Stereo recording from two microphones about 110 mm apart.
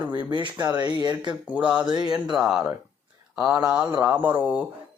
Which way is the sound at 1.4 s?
10° right (ahead or behind).